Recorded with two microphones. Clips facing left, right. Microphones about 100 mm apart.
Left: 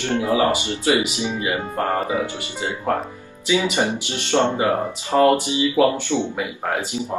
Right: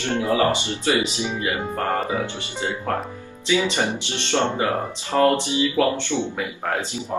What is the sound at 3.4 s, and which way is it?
Speech, 15° left (ahead or behind).